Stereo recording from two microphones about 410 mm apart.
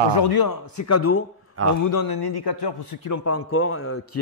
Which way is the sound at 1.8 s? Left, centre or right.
Left.